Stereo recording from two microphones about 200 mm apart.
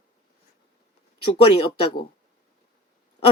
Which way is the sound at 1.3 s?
30° left (ahead or behind).